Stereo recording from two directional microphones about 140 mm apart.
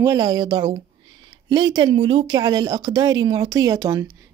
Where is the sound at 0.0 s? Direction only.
25° right (ahead or behind).